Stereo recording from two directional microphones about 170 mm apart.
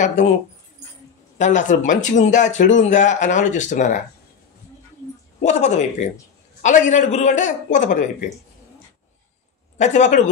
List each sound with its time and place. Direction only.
1.4 s a man's voice: 45° left (ahead or behind)
5.4 s a man's voice: 45° left (ahead or behind)
9.8 s a man's voice: 45° left (ahead or behind)